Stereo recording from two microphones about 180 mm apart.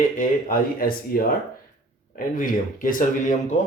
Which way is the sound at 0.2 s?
50° left (ahead or behind).